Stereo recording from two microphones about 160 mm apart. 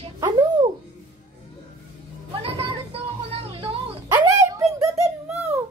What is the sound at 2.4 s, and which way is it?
Music, 35° right (ahead or behind).